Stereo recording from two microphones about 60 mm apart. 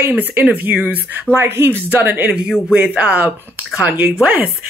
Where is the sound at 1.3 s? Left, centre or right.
Right.